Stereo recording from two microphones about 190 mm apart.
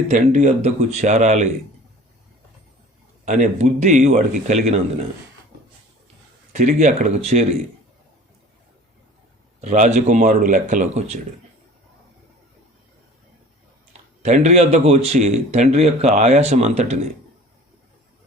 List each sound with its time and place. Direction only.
0.1 s speech: 40° right (ahead or behind)
3.2 s speech: 40° right (ahead or behind)
6.5 s speech: 40° right (ahead or behind)
9.6 s speech: 40° right (ahead or behind)
14.2 s speech: 35° right (ahead or behind)